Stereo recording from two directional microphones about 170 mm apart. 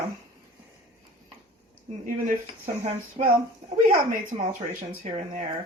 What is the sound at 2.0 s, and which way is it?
Speech, 55° right (ahead or behind).